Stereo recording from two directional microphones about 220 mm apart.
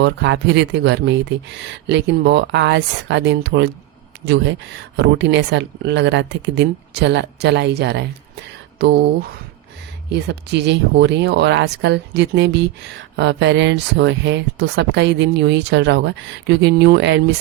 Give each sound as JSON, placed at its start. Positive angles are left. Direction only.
{"t": 0.0, "sound": "speech", "side_deg": -50}
{"t": 4.9, "sound": "speech", "side_deg": -55}